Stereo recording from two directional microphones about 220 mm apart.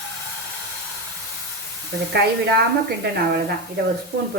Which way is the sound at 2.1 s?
50° right (ahead or behind).